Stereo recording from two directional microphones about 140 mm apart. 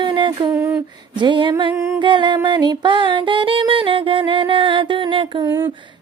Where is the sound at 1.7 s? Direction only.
20° right (ahead or behind).